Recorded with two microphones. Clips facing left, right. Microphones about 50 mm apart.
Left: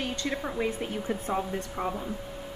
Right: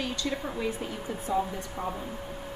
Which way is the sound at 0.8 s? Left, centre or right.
Left.